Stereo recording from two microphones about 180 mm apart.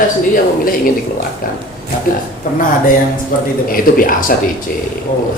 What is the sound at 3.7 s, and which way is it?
Speech, 50° left (ahead or behind).